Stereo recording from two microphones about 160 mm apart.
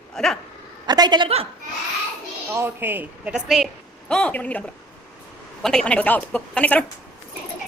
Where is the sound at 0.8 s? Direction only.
25° right (ahead or behind).